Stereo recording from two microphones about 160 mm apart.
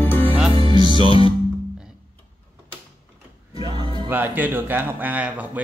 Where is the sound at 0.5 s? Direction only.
30° left (ahead or behind).